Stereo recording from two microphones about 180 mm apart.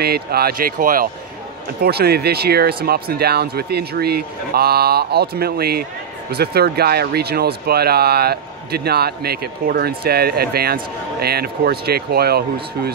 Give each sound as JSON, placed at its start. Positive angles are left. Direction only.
{"t": 0.0, "sound": "speech", "side_deg": -60}
{"t": 1.8, "sound": "speech", "side_deg": -60}